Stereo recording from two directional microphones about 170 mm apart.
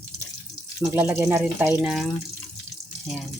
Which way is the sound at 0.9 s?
10° right (ahead or behind).